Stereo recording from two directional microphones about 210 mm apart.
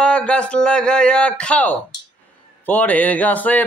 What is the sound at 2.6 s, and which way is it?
Speech, 10° left (ahead or behind).